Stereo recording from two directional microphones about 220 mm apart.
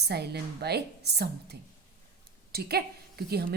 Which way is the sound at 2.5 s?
45° right (ahead or behind).